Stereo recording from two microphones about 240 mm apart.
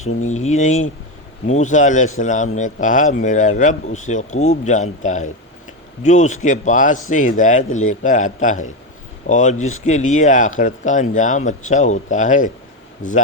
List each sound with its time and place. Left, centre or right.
0.3 s speech: left